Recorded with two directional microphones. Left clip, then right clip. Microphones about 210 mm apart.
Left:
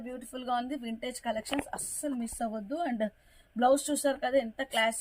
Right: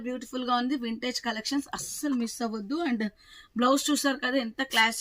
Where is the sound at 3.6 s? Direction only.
10° left (ahead or behind).